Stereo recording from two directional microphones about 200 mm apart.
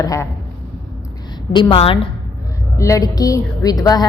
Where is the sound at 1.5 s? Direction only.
25° left (ahead or behind).